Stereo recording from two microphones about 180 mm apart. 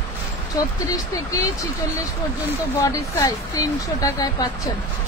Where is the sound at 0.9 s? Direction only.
20° left (ahead or behind).